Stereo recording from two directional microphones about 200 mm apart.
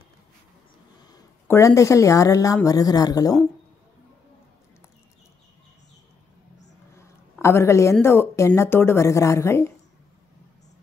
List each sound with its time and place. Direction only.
1.0 s speech: 15° left (ahead or behind)
7.4 s speech: 15° left (ahead or behind)